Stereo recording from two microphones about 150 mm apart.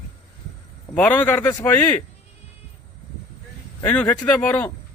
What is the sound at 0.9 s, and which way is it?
A man's voice, 10° left (ahead or behind).